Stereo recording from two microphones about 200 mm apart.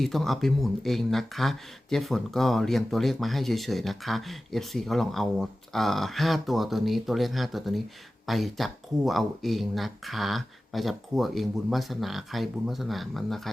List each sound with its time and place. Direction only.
0.0 s speech: centre (ahead or behind)